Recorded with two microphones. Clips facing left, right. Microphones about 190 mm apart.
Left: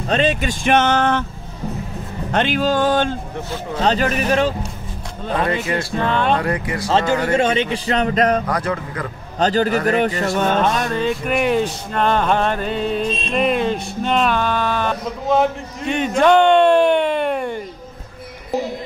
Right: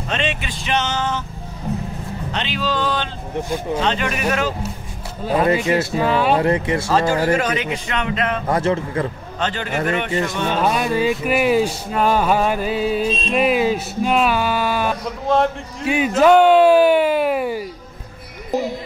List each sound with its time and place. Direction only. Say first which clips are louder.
0.1 s speech: left 7 dB; 40° left (ahead or behind); by 1.2 s 60° left (ahead or behind)
2.3 s speech: left 6 dB; 50° left (ahead or behind)
3.4 s speech: right 5 dB; 15° right (ahead or behind)
3.8 s a man's voice: left 3 dB; 35° left (ahead or behind)
5.2 s speech: right 3 dB; 5° right (ahead or behind)
5.7 s a man's voice: right 4 dB; 20° right (ahead or behind)
5.9 s speech: left 1 dB; 5° right (ahead or behind)
6.4 s a man's voice: right 4 dB; 25° right (ahead or behind)
6.9 s a man's voice: left 1 dB; 25° left (ahead or behind)
8.5 s a man's voice: right 3 dB; 25° right (ahead or behind)
9.4 s a man's voice: left 6 dB; 40° left (ahead or behind)
10.6 s speech: right 1 dB; 5° right (ahead or behind)
15.2 s a man's voice: left 1 dB; centre (ahead or behind)